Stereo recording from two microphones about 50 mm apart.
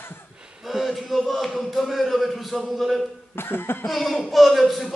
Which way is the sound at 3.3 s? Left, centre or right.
Left.